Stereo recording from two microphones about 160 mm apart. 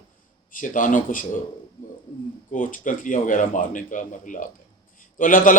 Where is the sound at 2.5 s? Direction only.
55° left (ahead or behind).